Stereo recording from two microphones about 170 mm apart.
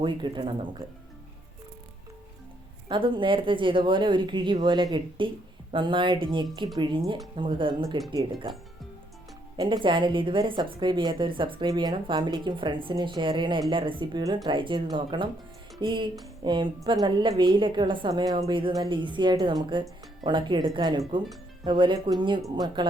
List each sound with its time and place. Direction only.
0.0 s a woman's voice: 30° right (ahead or behind)
2.9 s a woman's voice: 30° right (ahead or behind)
9.6 s a woman's voice: 25° right (ahead or behind)